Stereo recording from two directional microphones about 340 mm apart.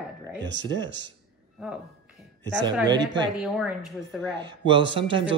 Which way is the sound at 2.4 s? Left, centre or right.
Centre.